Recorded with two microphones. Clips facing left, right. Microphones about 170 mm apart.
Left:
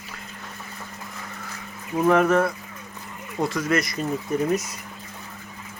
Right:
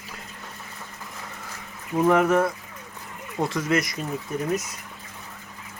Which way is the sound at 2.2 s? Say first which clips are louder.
Left 1 dB; 15° right (ahead or behind).